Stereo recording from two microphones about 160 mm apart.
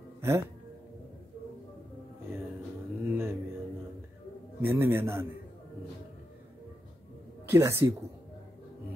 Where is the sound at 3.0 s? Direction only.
15° right (ahead or behind).